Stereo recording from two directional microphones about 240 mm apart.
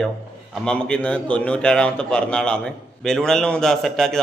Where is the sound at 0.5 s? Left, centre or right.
Centre.